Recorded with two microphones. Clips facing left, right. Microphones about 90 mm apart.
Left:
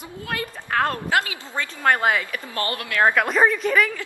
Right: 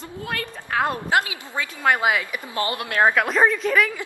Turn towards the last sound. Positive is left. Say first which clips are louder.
# even
turn(degrees=0)  # may be behind; listen again after turning